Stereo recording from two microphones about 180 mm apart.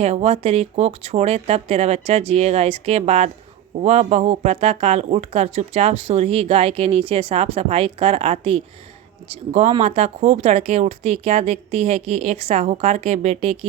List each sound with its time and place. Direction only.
0.0 s speech: 35° right (ahead or behind)